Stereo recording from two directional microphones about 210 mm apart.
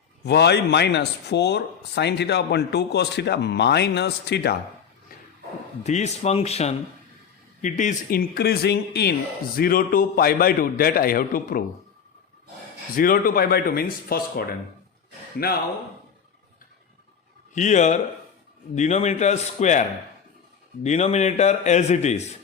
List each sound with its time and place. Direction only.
0.3 s speech: 50° left (ahead or behind)
5.8 s a man's voice: 35° left (ahead or behind)
13.0 s speech: 45° left (ahead or behind)
17.5 s a man's voice: 35° left (ahead or behind)
20.8 s a man's voice: 30° left (ahead or behind)